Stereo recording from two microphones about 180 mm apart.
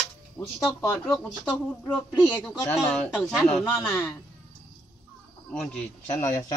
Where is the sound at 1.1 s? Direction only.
5° left (ahead or behind).